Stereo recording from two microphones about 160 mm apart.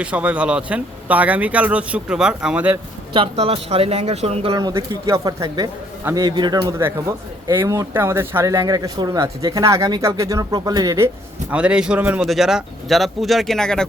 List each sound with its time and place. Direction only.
0.0 s speech: 10° right (ahead or behind)
3.1 s speech: 35° right (ahead or behind)
4.5 s speech: 25° right (ahead or behind)
11.5 s speech: 5° right (ahead or behind)